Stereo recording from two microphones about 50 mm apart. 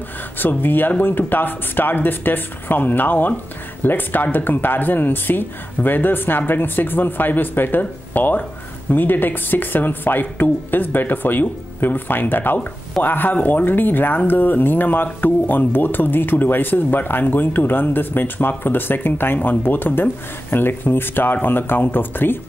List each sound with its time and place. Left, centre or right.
0.4 s speech: left